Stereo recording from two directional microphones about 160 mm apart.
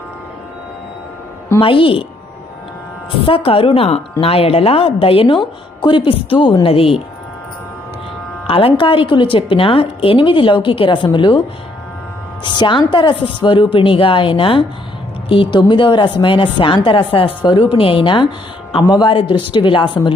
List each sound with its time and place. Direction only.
1.6 s a woman's voice: 35° left (ahead or behind)
3.2 s a woman's voice: 35° left (ahead or behind)
8.4 s a woman's voice: 35° left (ahead or behind)
12.5 s a woman's voice: 30° left (ahead or behind)